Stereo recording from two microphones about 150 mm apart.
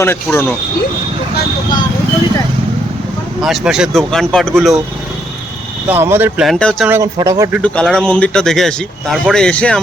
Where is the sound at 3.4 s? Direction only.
5° right (ahead or behind).